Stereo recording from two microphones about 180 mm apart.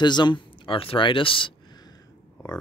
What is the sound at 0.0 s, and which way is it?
Speech, 25° left (ahead or behind).